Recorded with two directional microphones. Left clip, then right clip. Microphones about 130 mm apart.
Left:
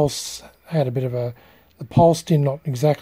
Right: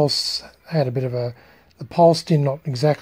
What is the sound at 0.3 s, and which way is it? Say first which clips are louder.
Speech: right 4 dB; 15° left (ahead or behind).